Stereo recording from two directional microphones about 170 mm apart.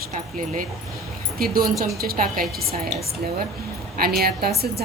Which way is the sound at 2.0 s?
60° right (ahead or behind).